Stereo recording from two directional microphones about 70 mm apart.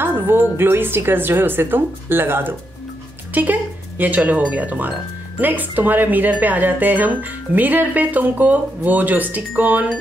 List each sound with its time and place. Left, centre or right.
0.0 s a woman's voice: right
4.0 s speech: right